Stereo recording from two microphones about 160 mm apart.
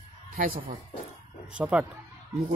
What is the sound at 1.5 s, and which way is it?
Speech, 5° right (ahead or behind).